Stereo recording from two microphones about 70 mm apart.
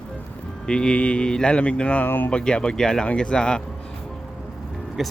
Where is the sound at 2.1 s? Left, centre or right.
Left.